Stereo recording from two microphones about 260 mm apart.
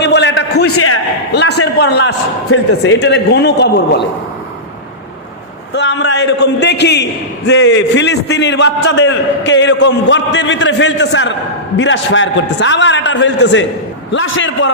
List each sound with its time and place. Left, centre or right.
0.0 s a sound: left
1.3 s a man's voice: left
2.5 s a man's voice: left
5.7 s a man's voice: left